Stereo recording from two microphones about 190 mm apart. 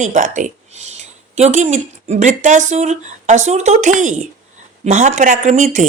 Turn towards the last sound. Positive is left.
turn(degrees=-40)  # may be behind; listen again after turning